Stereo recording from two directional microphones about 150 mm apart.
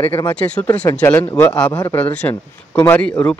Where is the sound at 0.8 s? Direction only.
25° left (ahead or behind).